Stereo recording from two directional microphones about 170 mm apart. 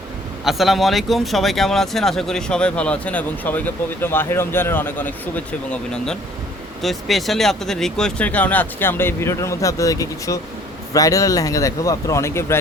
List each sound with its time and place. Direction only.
0.4 s speech: centre (ahead or behind); by 12.5 s 15° left (ahead or behind)